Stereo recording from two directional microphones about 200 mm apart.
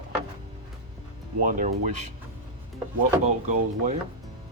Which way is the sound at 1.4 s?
40° right (ahead or behind).